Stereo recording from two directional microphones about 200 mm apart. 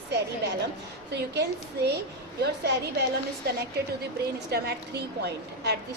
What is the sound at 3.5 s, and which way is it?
A woman's voice, 50° right (ahead or behind).